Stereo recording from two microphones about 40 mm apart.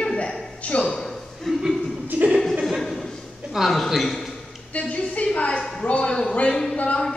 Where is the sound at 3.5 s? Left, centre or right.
Centre.